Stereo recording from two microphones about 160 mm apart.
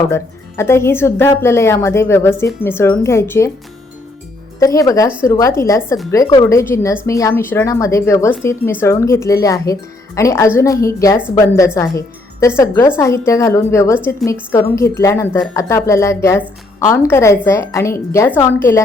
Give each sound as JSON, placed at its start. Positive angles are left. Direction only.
{"t": 0.1, "sound": "a woman's voice", "side_deg": 15}
{"t": 4.6, "sound": "a woman's voice", "side_deg": 20}